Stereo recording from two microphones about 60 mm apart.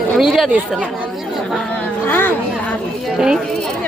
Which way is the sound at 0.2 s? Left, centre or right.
Centre.